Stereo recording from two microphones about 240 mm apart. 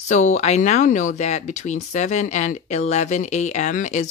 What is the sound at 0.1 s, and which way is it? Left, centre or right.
Speech, left.